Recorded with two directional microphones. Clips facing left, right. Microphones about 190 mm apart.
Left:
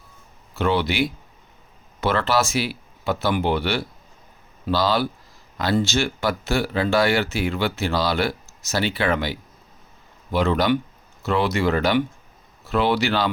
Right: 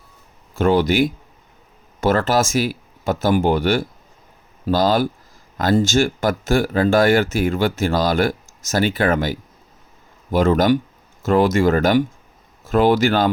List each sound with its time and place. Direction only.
0.5 s speech: 45° right (ahead or behind)